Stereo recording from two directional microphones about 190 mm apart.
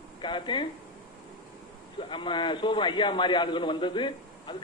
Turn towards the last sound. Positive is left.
turn(degrees=25)  # may be behind; listen again after turning